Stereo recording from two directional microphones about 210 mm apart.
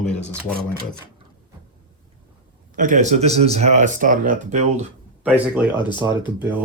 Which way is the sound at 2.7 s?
40° right (ahead or behind).